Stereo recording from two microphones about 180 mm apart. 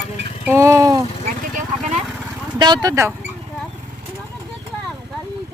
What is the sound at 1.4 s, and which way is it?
Vehicle, 50° right (ahead or behind).